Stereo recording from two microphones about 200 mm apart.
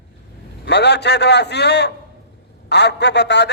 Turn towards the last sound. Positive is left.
turn(degrees=60)  # may be behind; listen again after turning